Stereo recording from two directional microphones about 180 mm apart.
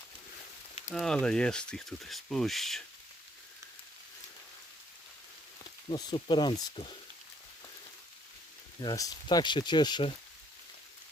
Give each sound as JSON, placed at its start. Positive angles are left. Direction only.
{"t": 0.9, "sound": "speech", "side_deg": 5}
{"t": 5.9, "sound": "speech", "side_deg": 25}
{"t": 8.8, "sound": "speech", "side_deg": 20}